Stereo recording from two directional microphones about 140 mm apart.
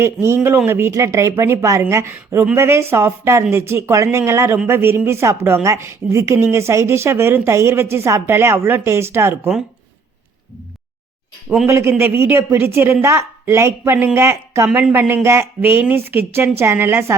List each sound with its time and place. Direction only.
0.0 s speech: 20° right (ahead or behind)
11.4 s speech: 5° right (ahead or behind)
11.7 s speech: 20° right (ahead or behind)
14.7 s speech: 10° right (ahead or behind)